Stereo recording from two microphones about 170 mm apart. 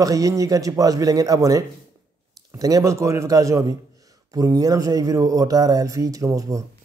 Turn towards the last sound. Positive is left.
turn(degrees=-20)  # may be behind; listen again after turning